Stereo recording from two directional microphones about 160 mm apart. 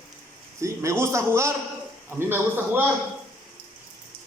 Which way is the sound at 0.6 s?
20° right (ahead or behind).